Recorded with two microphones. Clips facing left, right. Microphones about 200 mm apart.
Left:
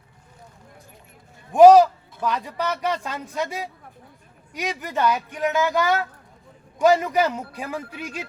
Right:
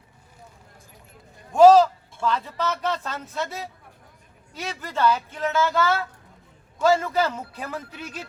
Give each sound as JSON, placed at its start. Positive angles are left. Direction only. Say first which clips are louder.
{"t": 1.5, "sound": "speech", "louder": "left 2 dB", "side_deg": 15}